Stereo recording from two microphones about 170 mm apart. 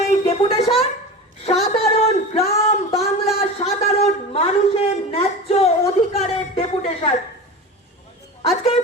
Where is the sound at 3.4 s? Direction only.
35° left (ahead or behind).